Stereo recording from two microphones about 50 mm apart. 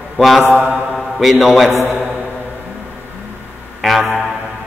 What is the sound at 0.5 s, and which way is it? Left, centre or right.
Mantra, right.